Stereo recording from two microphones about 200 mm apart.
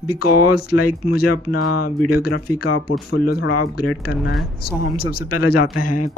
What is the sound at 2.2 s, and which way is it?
A man's voice, 50° left (ahead or behind).